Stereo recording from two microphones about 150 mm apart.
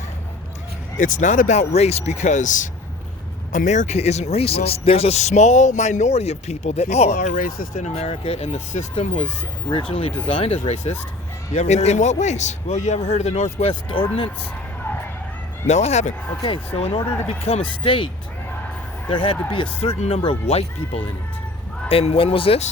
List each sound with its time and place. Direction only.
0.9 s speech: 60° left (ahead or behind)
7.1 s speech: 75° left (ahead or behind)
7.8 s speech: 45° left (ahead or behind)
15.6 s speech: 50° left (ahead or behind)
19.1 s speech: 35° left (ahead or behind)